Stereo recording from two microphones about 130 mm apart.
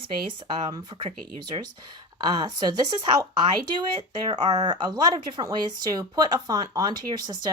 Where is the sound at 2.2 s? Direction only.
35° right (ahead or behind).